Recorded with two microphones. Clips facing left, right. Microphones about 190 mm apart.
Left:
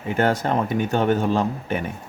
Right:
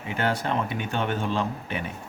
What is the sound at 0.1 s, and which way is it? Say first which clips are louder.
Speech: left 6 dB; 45° left (ahead or behind).